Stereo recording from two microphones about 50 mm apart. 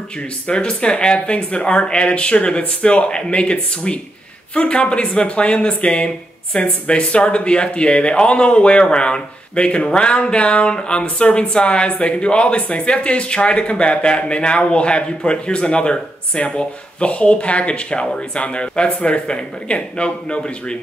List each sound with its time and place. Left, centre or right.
0.5 s speech: centre